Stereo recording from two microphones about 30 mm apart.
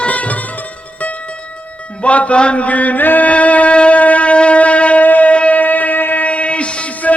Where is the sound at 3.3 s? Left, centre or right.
Left.